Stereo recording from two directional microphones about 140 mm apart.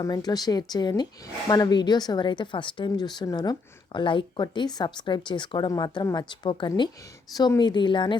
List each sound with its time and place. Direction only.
0.0 s speech: 30° left (ahead or behind)